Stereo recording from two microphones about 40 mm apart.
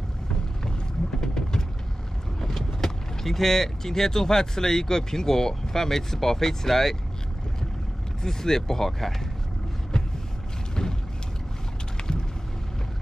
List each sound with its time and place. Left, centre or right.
1.2 s vehicle: centre
2.4 s speech: centre
8.2 s speech: centre
10.7 s vehicle: centre
12.0 s vehicle: left